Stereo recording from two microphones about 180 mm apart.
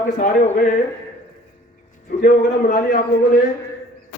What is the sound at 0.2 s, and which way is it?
Speech, 50° left (ahead or behind).